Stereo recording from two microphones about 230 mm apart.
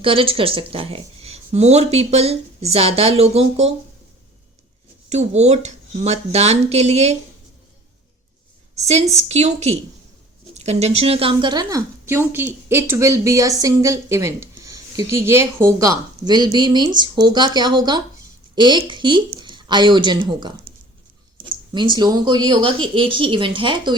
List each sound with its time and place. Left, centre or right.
0.0 s speech: right
5.0 s speech: right
8.7 s a woman's voice: right
21.5 s speech: centre